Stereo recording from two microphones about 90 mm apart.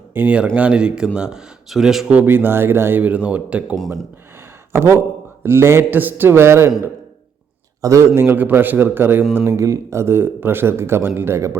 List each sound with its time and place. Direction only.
0.1 s speech: 20° right (ahead or behind); by 2.0 s 5° right (ahead or behind)
2.0 s a man's voice: 20° right (ahead or behind)
4.7 s a man's voice: 30° right (ahead or behind)
7.8 s a man's voice: 35° right (ahead or behind)
9.5 s a man's voice: 35° right (ahead or behind)